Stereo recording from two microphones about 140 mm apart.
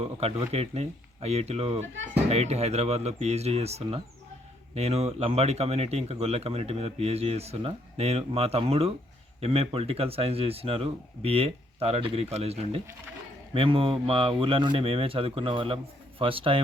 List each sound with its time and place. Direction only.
0.0 s speech: 45° right (ahead or behind)